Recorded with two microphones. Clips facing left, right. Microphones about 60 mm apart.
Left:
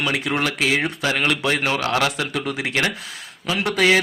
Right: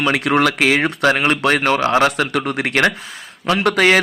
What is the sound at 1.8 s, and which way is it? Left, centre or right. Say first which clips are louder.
Speech: right 6 dB; right.